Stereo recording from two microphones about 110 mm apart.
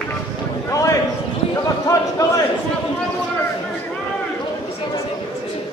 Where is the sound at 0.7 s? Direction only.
30° left (ahead or behind).